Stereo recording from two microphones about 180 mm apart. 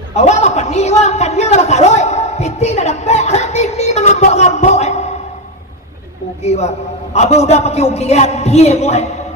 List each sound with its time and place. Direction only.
0.1 s a man's voice: 40° left (ahead or behind)
6.4 s a man's voice: 35° left (ahead or behind)